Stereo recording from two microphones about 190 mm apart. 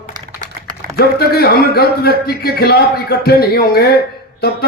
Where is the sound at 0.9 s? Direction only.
55° left (ahead or behind).